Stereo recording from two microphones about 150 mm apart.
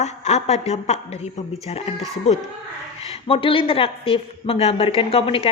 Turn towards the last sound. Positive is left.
turn(degrees=40)  # may be behind; listen again after turning